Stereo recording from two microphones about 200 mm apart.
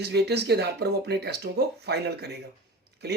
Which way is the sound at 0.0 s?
55° right (ahead or behind).